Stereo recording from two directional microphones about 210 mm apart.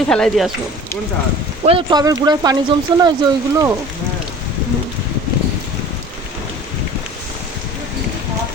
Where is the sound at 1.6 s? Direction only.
25° right (ahead or behind).